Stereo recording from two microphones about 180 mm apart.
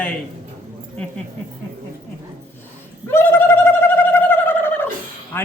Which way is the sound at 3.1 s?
15° left (ahead or behind).